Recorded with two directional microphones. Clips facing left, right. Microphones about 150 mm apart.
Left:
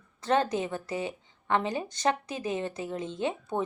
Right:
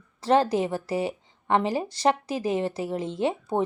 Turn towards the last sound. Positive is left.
turn(degrees=-35)  # may be behind; listen again after turning